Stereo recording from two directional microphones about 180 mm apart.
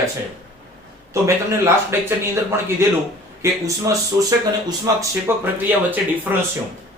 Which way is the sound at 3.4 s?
20° right (ahead or behind).